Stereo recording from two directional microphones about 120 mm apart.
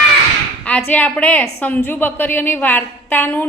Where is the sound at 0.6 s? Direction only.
10° left (ahead or behind).